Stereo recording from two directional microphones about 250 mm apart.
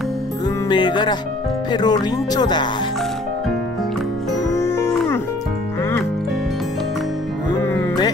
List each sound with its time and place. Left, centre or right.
0.7 s music: centre
4.5 s music: centre
7.5 s music: centre